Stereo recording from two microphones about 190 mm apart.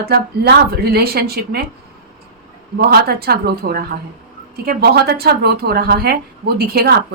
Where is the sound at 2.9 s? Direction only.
55° right (ahead or behind).